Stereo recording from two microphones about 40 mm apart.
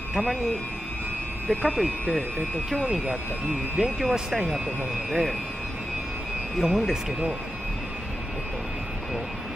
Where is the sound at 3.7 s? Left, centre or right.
Centre.